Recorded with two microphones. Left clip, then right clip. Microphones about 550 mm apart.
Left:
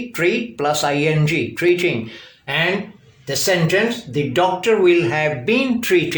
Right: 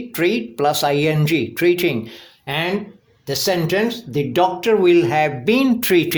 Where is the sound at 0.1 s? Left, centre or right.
Right.